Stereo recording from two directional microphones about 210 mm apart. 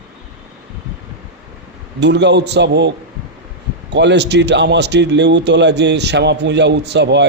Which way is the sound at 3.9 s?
55° right (ahead or behind).